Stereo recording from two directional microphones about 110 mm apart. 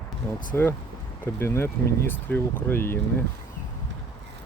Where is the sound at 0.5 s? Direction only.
20° left (ahead or behind).